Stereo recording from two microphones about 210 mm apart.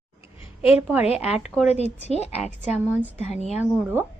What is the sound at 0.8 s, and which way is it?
Speech, 5° right (ahead or behind).